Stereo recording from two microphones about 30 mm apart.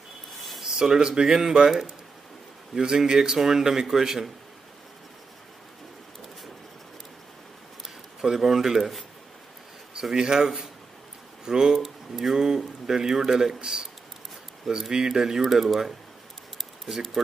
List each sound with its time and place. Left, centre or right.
0.6 s speech: centre
8.2 s speech: centre
10.1 s speech: centre
11.8 s speech: centre
15.4 s speech: centre